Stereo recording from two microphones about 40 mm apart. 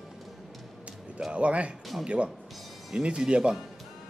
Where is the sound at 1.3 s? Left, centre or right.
Right.